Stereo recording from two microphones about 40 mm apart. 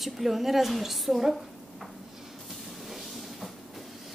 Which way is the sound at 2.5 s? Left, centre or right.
Centre.